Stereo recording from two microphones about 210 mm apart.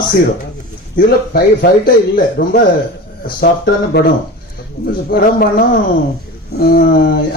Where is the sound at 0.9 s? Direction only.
45° left (ahead or behind).